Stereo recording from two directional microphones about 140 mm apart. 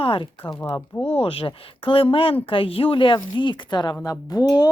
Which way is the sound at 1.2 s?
40° left (ahead or behind).